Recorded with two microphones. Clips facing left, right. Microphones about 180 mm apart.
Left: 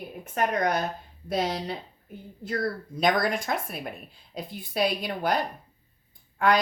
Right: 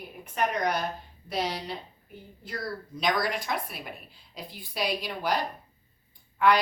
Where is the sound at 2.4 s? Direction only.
55° left (ahead or behind).